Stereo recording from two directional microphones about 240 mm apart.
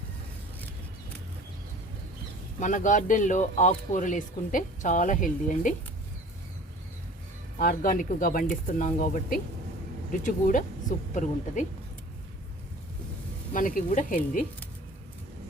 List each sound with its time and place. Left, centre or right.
2.6 s speech: left
7.6 s speech: left
13.5 s speech: left